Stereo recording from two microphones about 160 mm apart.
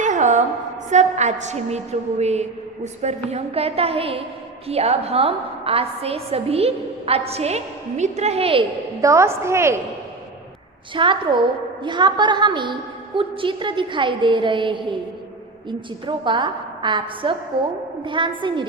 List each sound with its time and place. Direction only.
0.0 s a sound: 50° right (ahead or behind)
0.9 s a woman's voice: 45° right (ahead or behind)
9.0 s a woman's voice: 20° right (ahead or behind)
10.9 s a woman's voice: 30° right (ahead or behind)
16.0 s a woman's voice: 30° right (ahead or behind)
17.5 s a woman's voice: 85° right
18.0 s a woman's voice: 30° right (ahead or behind)